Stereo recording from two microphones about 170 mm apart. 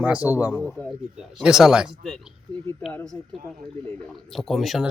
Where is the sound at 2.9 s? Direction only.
10° left (ahead or behind).